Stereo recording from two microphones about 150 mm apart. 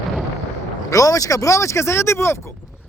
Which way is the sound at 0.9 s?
20° left (ahead or behind).